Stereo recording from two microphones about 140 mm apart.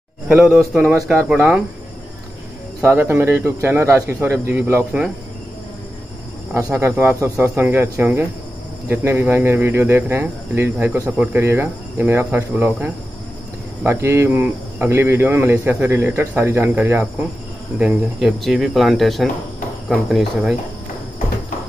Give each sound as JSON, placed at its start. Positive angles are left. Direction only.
{"t": 0.3, "sound": "speech", "side_deg": -5}
{"t": 2.8, "sound": "speech", "side_deg": -15}
{"t": 6.5, "sound": "speech", "side_deg": -15}